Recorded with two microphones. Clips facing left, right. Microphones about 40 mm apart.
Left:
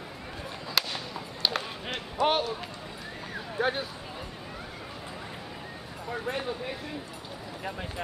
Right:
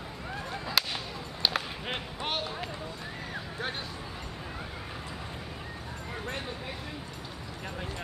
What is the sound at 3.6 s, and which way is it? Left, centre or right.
Speech, centre.